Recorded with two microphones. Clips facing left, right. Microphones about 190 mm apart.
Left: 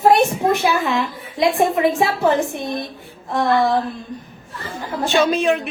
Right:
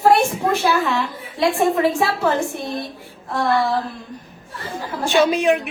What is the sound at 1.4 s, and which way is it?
Speech, 15° left (ahead or behind).